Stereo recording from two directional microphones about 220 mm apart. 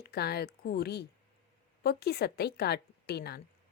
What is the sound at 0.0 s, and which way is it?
A woman's voice, 45° left (ahead or behind).